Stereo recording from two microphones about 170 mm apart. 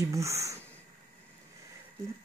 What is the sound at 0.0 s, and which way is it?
Speech, 20° right (ahead or behind).